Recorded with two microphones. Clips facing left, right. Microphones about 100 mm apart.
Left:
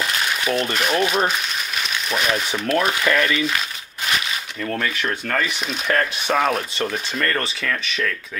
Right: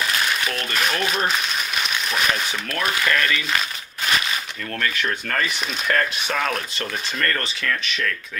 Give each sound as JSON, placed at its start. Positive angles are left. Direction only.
{"t": 0.5, "sound": "speech", "side_deg": 20}
{"t": 2.6, "sound": "speech", "side_deg": 25}
{"t": 4.6, "sound": "speech", "side_deg": 10}
{"t": 6.2, "sound": "speech", "side_deg": 15}
{"t": 7.2, "sound": "speech", "side_deg": 5}